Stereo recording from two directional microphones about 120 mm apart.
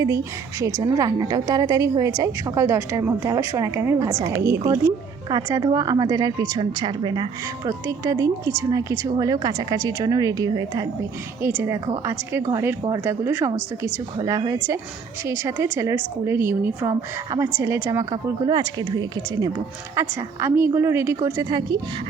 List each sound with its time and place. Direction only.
0.6 s a woman's voice: 30° right (ahead or behind)
11.4 s a woman's voice: 20° right (ahead or behind)
18.1 s a woman's voice: 35° right (ahead or behind)
20.0 s a woman's voice: 20° right (ahead or behind)